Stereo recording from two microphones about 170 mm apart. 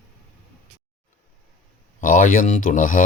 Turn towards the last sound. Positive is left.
turn(degrees=50)  # may be behind; listen again after turning